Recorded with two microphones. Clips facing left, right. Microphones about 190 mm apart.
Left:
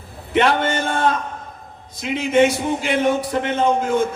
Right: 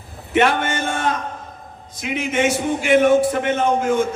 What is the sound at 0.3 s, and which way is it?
Speech, 50° right (ahead or behind).